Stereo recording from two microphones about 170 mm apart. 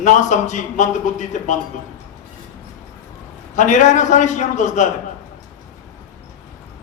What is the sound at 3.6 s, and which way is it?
A man's voice, 45° left (ahead or behind).